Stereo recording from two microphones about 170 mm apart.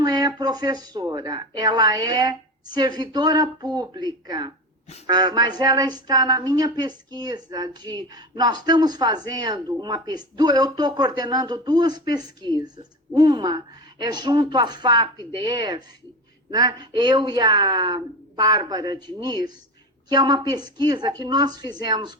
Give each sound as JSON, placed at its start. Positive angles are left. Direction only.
{"t": 0.0, "sound": "speech", "side_deg": -25}